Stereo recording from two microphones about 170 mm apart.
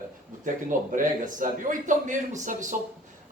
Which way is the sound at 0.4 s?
50° right (ahead or behind).